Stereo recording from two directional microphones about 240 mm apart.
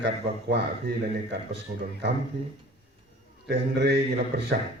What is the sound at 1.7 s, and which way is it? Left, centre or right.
Speech, right.